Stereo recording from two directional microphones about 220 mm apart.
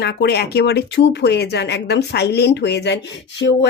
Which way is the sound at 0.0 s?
50° left (ahead or behind).